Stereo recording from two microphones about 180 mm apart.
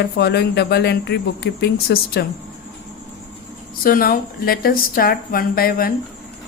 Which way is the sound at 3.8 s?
55° left (ahead or behind).